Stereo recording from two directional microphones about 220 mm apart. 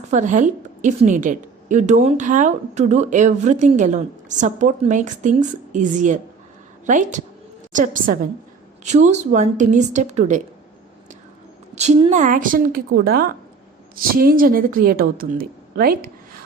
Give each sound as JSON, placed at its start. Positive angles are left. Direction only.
{"t": 0.1, "sound": "a woman's voice", "side_deg": -35}
{"t": 11.7, "sound": "a woman's voice", "side_deg": -30}